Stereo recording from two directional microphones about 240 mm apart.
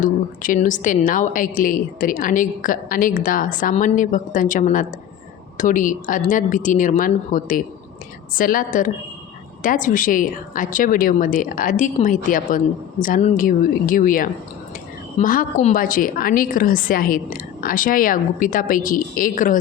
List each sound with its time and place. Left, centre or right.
0.0 s a woman's voice: left